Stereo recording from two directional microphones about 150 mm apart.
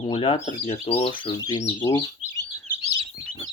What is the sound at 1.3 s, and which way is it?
Speech, 30° left (ahead or behind).